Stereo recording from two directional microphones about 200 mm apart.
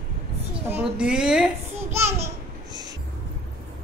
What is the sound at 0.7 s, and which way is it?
Speech, 5° right (ahead or behind).